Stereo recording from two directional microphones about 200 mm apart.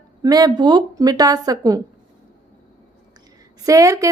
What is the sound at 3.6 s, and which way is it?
Speech, 15° right (ahead or behind).